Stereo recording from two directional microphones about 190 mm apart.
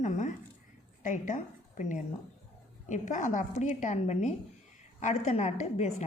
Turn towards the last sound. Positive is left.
turn(degrees=35)  # may be behind; listen again after turning